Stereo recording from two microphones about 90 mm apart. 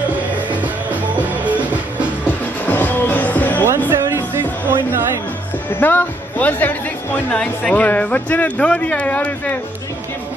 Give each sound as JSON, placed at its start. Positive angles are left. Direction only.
{"t": 1.1, "sound": "music", "side_deg": -15}
{"t": 2.2, "sound": "music", "side_deg": 20}
{"t": 4.1, "sound": "music", "side_deg": -25}
{"t": 5.8, "sound": "speech", "side_deg": 20}